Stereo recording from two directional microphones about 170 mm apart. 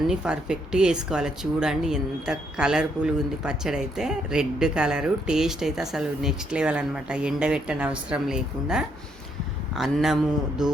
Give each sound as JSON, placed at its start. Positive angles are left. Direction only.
{"t": 0.1, "sound": "speech", "side_deg": -5}